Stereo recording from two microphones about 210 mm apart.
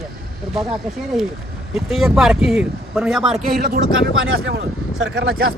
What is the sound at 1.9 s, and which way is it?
Speech, centre (ahead or behind).